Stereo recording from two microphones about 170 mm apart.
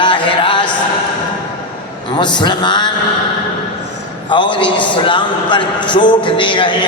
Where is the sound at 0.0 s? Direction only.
30° left (ahead or behind).